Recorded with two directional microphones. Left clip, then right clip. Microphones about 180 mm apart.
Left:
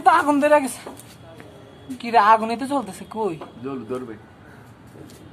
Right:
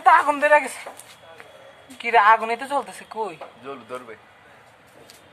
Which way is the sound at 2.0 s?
10° right (ahead or behind).